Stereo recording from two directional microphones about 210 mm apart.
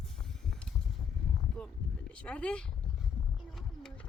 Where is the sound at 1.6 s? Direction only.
5° left (ahead or behind).